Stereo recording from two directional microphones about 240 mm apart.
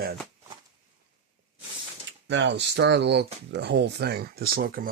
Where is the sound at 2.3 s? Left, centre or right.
Right.